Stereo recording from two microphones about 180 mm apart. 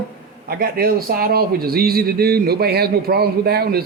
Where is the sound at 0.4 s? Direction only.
55° right (ahead or behind).